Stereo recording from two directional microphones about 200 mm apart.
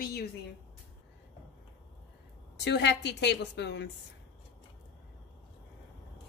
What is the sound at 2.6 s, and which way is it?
A woman's voice, 60° left (ahead or behind).